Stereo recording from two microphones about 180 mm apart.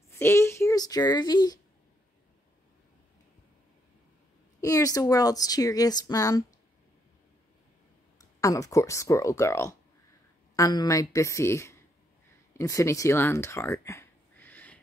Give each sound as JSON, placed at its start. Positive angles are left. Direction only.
{"t": 0.1, "sound": "speech", "side_deg": 15}
{"t": 4.6, "sound": "speech", "side_deg": 20}
{"t": 8.2, "sound": "speech", "side_deg": 20}